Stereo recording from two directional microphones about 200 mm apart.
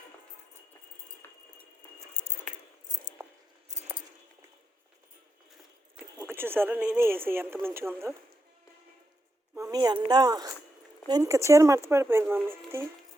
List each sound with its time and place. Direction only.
1.2 s a sound: 10° left (ahead or behind)
2.2 s keys jangling: 10° right (ahead or behind)
6.0 s speech: 10° right (ahead or behind)
9.6 s a woman's voice: 20° right (ahead or behind)